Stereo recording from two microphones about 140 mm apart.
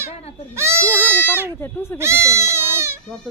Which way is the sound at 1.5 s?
15° left (ahead or behind).